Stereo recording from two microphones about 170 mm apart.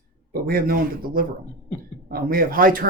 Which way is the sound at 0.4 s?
60° right (ahead or behind).